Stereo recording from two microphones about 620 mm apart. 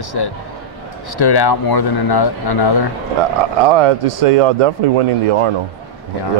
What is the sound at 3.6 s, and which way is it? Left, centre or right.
Speech, right.